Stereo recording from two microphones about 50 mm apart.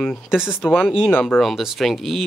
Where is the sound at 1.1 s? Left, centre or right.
Left.